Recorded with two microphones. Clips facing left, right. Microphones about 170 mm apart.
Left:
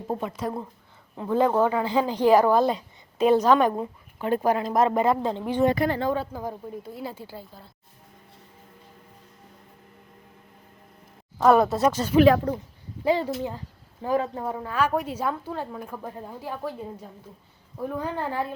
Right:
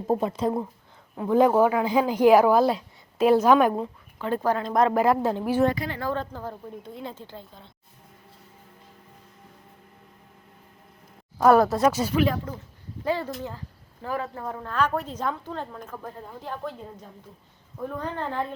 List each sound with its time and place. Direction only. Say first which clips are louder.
0.1 s speech: right 5 dB; 30° right (ahead or behind)
1.1 s speech: right 3 dB; 10° right (ahead or behind)
4.2 s a woman's voice: left 2 dB; 15° left (ahead or behind)
4.6 s speech: even; centre (ahead or behind)
5.7 s speech: left 8 dB; 55° left (ahead or behind)
6.1 s a woman's voice: left 2 dB; 10° left (ahead or behind)
11.3 s speech: right 1 dB; 5° right (ahead or behind)
13.1 s a woman's voice: left 4 dB; 15° left (ahead or behind)
14.4 s a woman's voice: left 1 dB; 10° left (ahead or behind)